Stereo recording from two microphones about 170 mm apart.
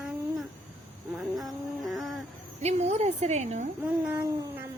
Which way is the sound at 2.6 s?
40° right (ahead or behind).